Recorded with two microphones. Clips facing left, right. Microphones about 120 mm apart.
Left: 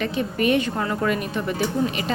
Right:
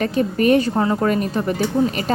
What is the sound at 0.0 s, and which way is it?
A woman's voice, 40° right (ahead or behind).